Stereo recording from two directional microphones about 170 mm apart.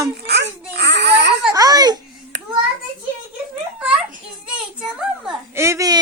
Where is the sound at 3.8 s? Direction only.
5° right (ahead or behind).